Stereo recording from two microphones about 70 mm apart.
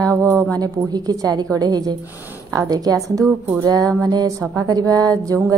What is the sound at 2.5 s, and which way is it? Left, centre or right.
Music, right.